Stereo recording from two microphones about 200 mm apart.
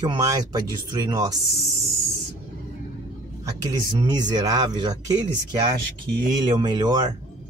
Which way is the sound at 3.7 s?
20° right (ahead or behind).